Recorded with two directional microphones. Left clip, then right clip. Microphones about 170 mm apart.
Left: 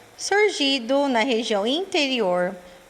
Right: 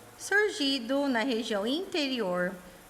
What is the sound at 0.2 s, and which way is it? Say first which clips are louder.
A woman's voice: left 7 dB; 20° left (ahead or behind).